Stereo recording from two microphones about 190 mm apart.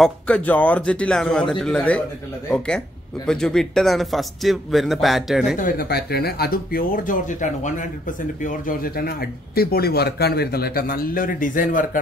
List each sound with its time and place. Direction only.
0.0 s a man's voice: 5° left (ahead or behind)
5.6 s speech: 55° left (ahead or behind)